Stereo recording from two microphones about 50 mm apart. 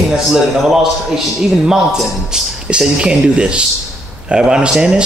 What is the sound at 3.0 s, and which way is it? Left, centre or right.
Speech, right.